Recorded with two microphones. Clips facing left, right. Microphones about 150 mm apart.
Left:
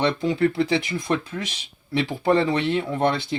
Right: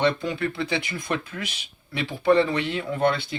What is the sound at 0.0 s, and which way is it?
Speech, 25° left (ahead or behind).